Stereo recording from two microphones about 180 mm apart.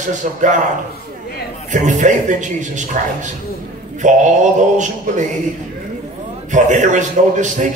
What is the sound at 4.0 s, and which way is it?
A man's voice, 45° right (ahead or behind).